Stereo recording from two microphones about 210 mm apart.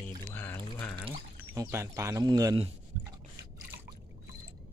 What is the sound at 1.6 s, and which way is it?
Speech, 10° right (ahead or behind).